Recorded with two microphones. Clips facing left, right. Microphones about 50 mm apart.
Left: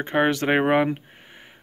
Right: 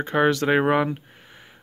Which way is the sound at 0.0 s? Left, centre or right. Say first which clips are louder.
Right 1 dB; left.